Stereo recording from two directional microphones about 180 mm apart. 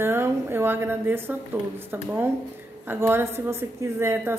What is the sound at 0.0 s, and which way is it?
A woman's voice, 15° right (ahead or behind).